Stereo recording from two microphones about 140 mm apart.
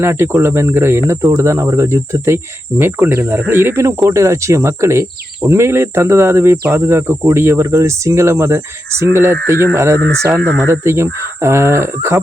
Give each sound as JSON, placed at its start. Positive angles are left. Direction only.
{"t": 0.0, "sound": "speech", "side_deg": -15}
{"t": 1.4, "sound": "cricket", "side_deg": -20}